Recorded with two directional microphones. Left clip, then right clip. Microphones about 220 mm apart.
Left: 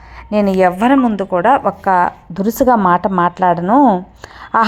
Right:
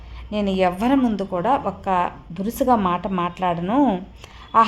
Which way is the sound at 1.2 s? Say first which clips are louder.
Left 8 dB; 20° left (ahead or behind).